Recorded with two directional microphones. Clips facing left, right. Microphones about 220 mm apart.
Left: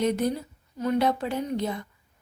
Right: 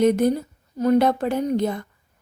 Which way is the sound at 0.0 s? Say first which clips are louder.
Right 7 dB; 50° right (ahead or behind).